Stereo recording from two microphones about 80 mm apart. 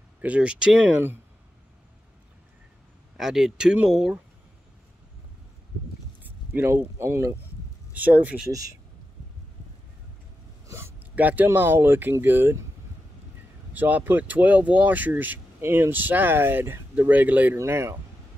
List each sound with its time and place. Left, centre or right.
0.2 s speech: centre
3.2 s speech: centre
6.2 s a sound: right
7.0 s speech: right
7.9 s speech: right
8.5 s speech: right
10.7 s a sound: right
11.1 s speech: right
13.7 s speech: right
17.6 s speech: right